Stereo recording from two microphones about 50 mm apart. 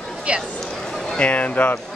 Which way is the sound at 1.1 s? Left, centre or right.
Left.